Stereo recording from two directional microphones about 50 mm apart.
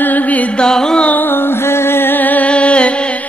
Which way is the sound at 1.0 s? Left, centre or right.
Left.